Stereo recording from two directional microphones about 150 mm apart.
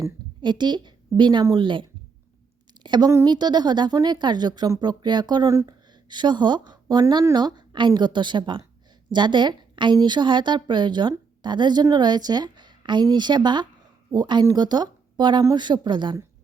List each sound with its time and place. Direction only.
0.0 s a woman's voice: 30° right (ahead or behind)